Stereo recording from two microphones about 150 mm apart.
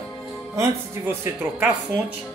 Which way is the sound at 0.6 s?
15° right (ahead or behind).